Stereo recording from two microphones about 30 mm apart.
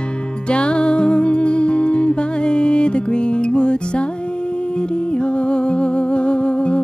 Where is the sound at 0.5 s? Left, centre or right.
Left.